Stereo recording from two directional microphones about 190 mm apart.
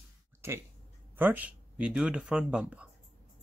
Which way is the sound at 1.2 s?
10° right (ahead or behind).